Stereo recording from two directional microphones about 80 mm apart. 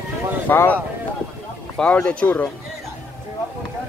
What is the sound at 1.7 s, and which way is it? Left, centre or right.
Speech, centre.